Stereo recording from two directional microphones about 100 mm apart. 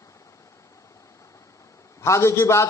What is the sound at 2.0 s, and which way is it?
Speech, 30° left (ahead or behind).